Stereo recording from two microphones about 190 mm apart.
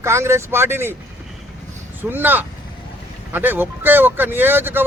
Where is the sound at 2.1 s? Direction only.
10° right (ahead or behind).